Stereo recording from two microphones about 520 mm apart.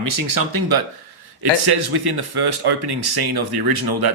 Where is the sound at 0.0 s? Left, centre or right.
Right.